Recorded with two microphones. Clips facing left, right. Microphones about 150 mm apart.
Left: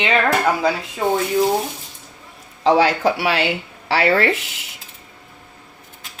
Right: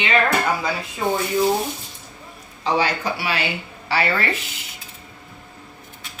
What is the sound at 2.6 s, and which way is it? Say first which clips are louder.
Speech: left 6 dB; 90° left.